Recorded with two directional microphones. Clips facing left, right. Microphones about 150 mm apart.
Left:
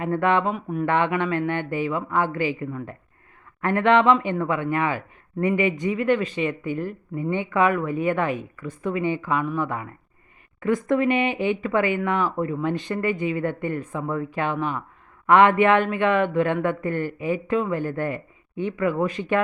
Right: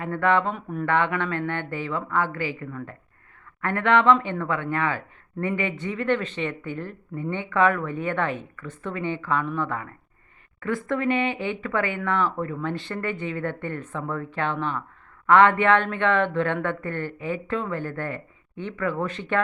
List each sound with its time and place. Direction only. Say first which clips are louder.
0.0 s speech: left 1 dB; 15° left (ahead or behind)